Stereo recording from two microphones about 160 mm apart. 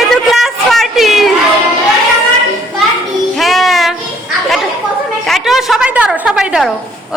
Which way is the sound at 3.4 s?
Centre (ahead or behind).